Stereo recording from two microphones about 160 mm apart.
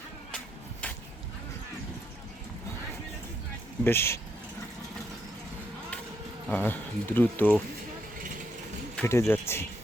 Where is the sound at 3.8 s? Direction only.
15° left (ahead or behind).